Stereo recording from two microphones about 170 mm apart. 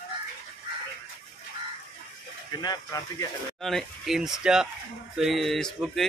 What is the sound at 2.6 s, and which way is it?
Speech, 20° left (ahead or behind).